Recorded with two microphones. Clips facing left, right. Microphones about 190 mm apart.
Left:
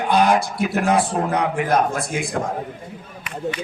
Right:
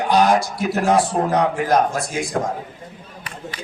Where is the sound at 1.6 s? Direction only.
55° left (ahead or behind).